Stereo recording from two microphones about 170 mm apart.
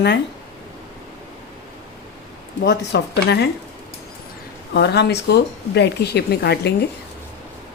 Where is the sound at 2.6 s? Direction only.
80° left.